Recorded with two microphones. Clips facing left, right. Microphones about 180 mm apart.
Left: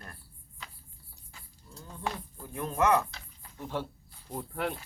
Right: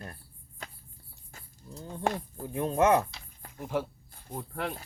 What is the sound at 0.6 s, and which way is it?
Cricket, 50° right (ahead or behind).